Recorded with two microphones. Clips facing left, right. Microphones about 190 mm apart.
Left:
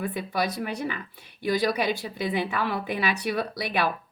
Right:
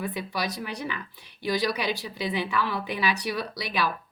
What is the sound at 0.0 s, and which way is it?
Speech, 55° left (ahead or behind).